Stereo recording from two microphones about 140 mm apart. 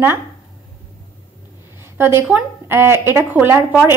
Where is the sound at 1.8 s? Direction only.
15° right (ahead or behind).